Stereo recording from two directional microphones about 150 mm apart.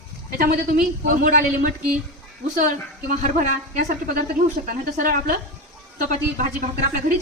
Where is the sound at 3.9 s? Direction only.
75° right (ahead or behind).